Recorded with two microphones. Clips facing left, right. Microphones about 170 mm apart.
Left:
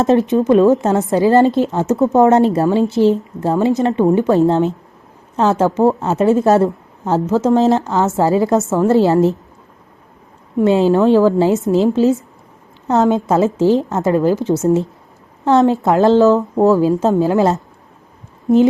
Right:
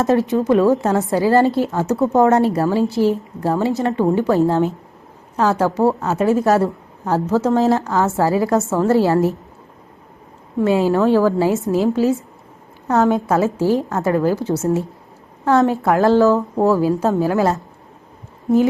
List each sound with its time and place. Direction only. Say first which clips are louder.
0.0 s a woman's voice: left 3 dB; 20° left (ahead or behind)
10.6 s a woman's voice: left 3 dB; 20° left (ahead or behind)